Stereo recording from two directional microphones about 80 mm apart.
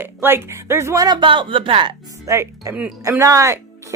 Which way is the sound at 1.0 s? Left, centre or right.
Right.